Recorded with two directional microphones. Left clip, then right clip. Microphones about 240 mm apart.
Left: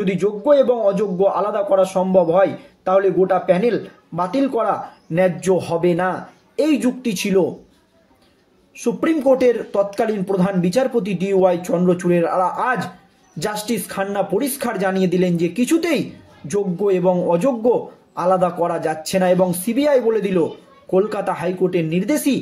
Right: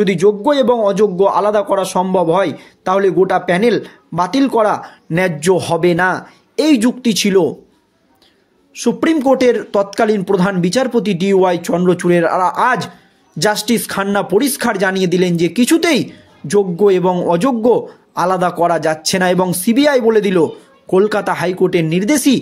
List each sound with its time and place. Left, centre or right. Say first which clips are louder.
0.0 s speech: right 7 dB; right
8.7 s speech: right 5 dB; right